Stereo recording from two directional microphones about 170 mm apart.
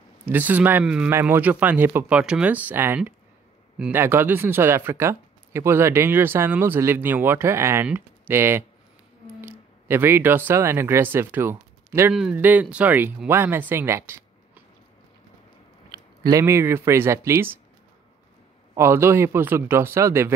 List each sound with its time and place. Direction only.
0.2 s speech: 10° right (ahead or behind)
15.9 s speech: 20° right (ahead or behind)
18.8 s speech: 15° right (ahead or behind)